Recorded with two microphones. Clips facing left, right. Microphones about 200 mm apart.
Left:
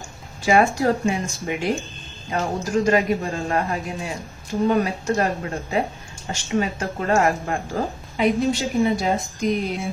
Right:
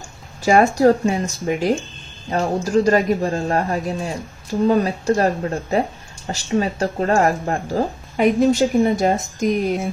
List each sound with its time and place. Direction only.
0.4 s speech: 40° right (ahead or behind)